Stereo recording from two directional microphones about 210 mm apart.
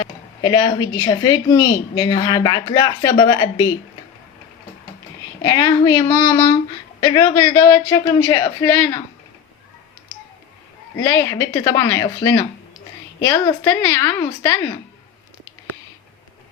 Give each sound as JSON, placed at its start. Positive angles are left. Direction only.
{"t": 0.0, "sound": "speech", "side_deg": 20}
{"t": 5.4, "sound": "speech", "side_deg": 15}
{"t": 10.9, "sound": "speech", "side_deg": 15}